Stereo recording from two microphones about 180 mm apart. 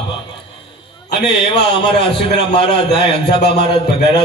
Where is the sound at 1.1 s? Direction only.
65° left (ahead or behind).